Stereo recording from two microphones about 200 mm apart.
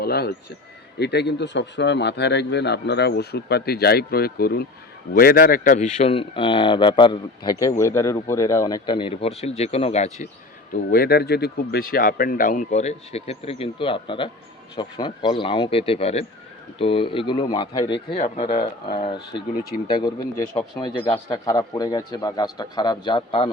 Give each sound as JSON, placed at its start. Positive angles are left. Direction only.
{"t": 0.0, "sound": "a man's voice", "side_deg": 50}
{"t": 10.9, "sound": "a man's voice", "side_deg": 50}
{"t": 19.9, "sound": "speech", "side_deg": 20}